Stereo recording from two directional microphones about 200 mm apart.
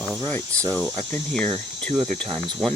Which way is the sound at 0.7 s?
10° left (ahead or behind).